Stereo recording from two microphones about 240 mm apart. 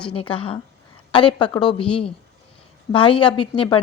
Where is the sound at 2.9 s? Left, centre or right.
Left.